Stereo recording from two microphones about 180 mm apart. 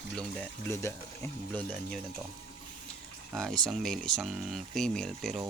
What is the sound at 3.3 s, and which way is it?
Speech, 5° left (ahead or behind).